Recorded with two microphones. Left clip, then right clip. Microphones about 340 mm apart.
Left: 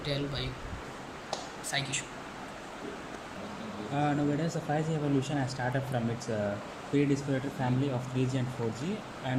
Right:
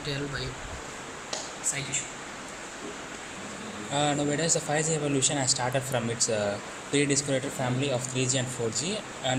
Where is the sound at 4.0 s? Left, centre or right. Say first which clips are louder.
Right 4 dB; centre.